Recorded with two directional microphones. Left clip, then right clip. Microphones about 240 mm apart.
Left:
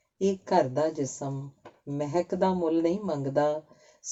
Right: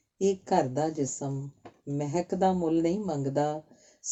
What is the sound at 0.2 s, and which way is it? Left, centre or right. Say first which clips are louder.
Speech: left 1 dB; right.